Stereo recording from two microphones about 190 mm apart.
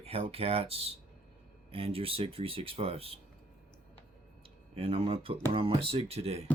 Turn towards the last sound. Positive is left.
turn(degrees=-30)  # may be behind; listen again after turning